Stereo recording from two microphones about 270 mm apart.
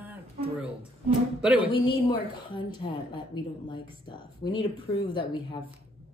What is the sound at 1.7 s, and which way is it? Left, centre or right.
Speech, centre.